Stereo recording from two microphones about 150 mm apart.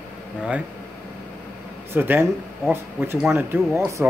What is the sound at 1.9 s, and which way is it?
Speech, 15° right (ahead or behind).